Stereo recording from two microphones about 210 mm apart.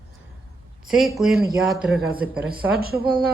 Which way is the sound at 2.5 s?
45° right (ahead or behind).